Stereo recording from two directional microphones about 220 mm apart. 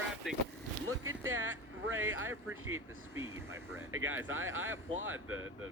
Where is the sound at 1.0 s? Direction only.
65° right (ahead or behind).